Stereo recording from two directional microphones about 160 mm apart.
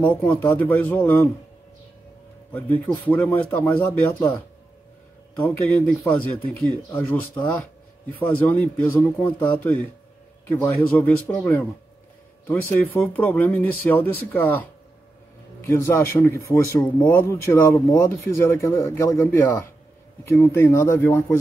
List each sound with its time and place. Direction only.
0.0 s speech: 10° left (ahead or behind)
2.5 s speech: 10° left (ahead or behind)